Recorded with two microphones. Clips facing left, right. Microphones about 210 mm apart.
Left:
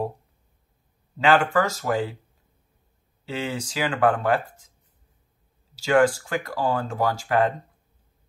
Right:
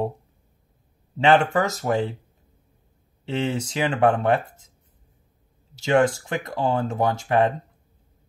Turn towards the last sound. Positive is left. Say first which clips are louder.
# right 2 dB
turn(degrees=-25)  # may be behind; listen again after turning